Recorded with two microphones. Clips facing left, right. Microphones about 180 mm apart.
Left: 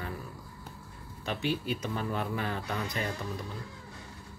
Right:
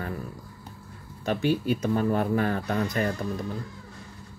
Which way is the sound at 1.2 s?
45° right (ahead or behind).